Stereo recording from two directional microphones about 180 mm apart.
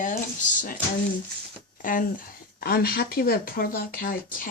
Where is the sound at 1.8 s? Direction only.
50° left (ahead or behind).